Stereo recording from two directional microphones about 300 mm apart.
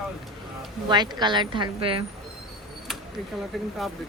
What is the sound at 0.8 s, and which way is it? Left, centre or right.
Speech, centre.